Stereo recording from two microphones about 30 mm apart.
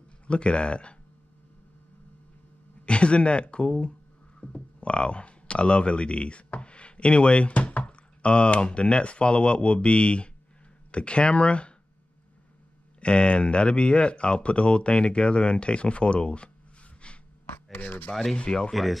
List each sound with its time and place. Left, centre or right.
0.3 s speech: left
2.8 s speech: left
7.5 s speech: left
13.0 s speech: left
17.7 s speech: left
18.3 s speech: left
18.7 s speech: centre